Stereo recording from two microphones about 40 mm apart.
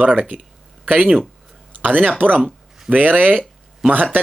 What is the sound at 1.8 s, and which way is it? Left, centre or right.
Speech, right.